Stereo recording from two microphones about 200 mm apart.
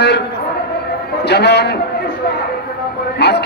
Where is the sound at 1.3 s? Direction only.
55° left (ahead or behind).